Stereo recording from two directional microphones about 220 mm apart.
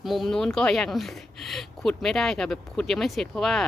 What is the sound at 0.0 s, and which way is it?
Speech, centre (ahead or behind).